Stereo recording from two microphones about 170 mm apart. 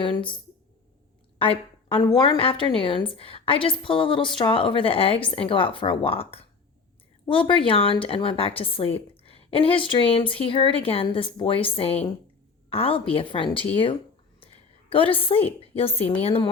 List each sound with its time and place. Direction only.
0.0 s speech: 30° left (ahead or behind)
1.4 s a woman's voice: 30° left (ahead or behind)